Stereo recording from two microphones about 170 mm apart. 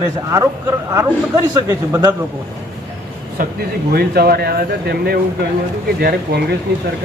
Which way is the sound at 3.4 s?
55° right (ahead or behind).